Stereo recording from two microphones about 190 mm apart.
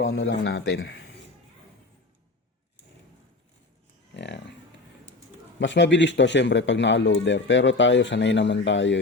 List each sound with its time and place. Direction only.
0.0 s speech: 75° left (ahead or behind)
4.1 s music: 65° left (ahead or behind)
5.5 s speech: 70° left (ahead or behind)